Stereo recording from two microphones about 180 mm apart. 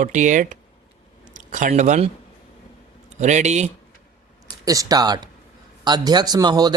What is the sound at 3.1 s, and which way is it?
Speech, 40° right (ahead or behind).